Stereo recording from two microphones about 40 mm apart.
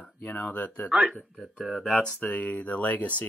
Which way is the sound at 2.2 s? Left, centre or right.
Left.